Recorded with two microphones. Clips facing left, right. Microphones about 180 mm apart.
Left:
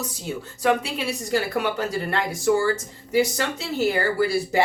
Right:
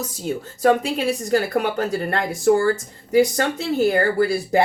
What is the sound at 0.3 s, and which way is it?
Speech, 45° right (ahead or behind).